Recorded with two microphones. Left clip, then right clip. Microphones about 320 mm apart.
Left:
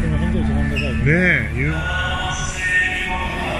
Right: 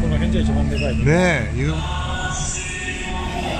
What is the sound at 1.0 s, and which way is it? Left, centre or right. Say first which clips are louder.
Speech: left 1 dB; right.